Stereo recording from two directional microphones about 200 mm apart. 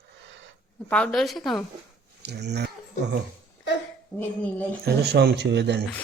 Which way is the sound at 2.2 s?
55° right (ahead or behind).